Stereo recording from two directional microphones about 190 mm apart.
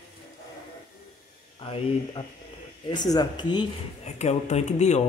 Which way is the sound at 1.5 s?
25° left (ahead or behind).